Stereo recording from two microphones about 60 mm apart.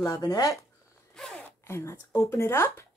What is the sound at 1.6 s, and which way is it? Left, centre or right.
Speech, left.